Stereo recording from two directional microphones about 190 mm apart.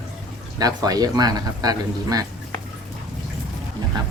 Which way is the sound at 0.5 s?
20° right (ahead or behind).